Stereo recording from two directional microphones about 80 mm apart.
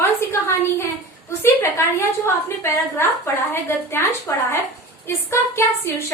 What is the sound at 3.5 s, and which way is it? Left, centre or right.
A woman's voice, left.